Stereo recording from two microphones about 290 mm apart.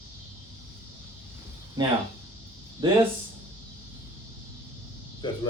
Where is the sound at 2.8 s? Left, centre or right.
Centre.